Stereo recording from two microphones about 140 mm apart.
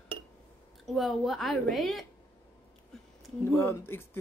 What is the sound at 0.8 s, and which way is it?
A woman's voice, centre (ahead or behind).